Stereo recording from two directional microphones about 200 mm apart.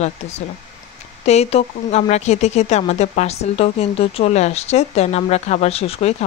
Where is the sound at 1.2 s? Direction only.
30° left (ahead or behind).